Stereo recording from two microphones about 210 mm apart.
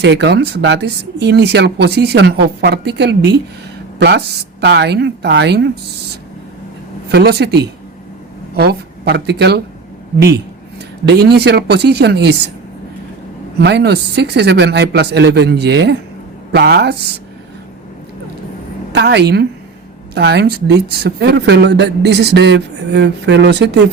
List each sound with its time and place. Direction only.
0.0 s speech: 55° right (ahead or behind)
4.6 s speech: 50° right (ahead or behind)
7.1 s speech: 50° right (ahead or behind)
11.0 s speech: 50° right (ahead or behind)
13.6 s speech: 50° right (ahead or behind)
18.9 s speech: 55° right (ahead or behind)